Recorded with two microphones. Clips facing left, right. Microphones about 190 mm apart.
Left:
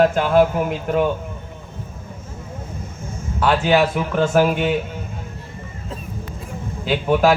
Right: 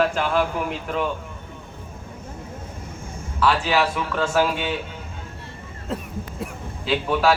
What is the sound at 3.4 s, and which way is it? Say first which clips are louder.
Speech: left 4 dB; 45° left (ahead or behind).